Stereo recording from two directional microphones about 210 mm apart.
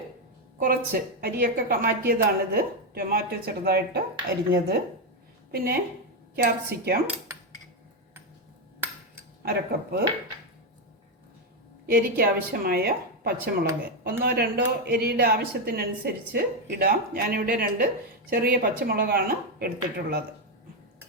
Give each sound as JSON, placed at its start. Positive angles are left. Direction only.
{"t": 0.6, "sound": "a woman's voice", "side_deg": -45}
{"t": 9.4, "sound": "speech", "side_deg": -50}
{"t": 11.9, "sound": "speech", "side_deg": -45}